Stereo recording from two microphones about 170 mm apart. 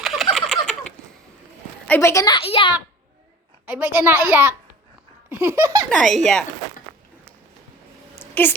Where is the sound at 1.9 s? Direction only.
15° left (ahead or behind); by 2.7 s 35° left (ahead or behind).